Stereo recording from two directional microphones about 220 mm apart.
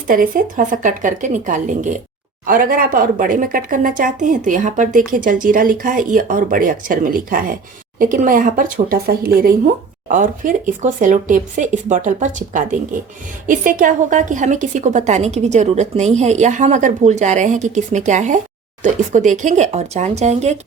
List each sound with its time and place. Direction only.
0.1 s speech: 40° right (ahead or behind)